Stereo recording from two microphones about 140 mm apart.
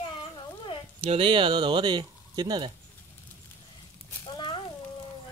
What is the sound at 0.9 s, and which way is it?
Speech, 40° right (ahead or behind).